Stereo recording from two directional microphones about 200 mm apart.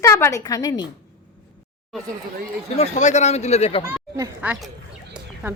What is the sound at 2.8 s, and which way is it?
Speech, 35° left (ahead or behind).